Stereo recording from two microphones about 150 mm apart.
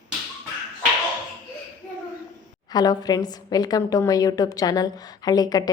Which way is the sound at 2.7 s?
25° left (ahead or behind).